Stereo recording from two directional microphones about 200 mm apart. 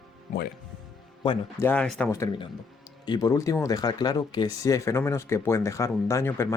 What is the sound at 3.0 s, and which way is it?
Speech, 20° left (ahead or behind).